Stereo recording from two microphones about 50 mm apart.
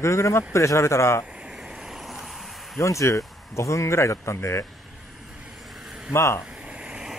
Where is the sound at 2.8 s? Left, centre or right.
Left.